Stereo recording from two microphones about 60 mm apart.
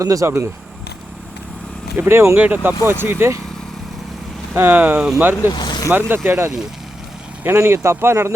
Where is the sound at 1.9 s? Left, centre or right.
Right.